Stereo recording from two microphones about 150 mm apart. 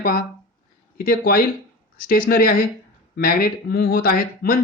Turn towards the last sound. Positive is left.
turn(degrees=75)  # may be behind; listen again after turning